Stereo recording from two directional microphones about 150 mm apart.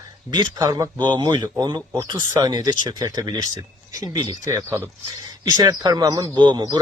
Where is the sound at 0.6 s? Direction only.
20° right (ahead or behind).